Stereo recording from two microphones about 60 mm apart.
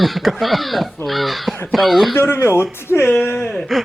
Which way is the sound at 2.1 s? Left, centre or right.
Left.